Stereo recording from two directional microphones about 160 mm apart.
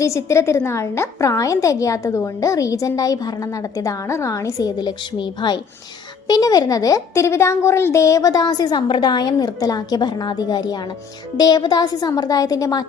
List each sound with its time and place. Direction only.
0.0 s a woman's voice: 20° left (ahead or behind)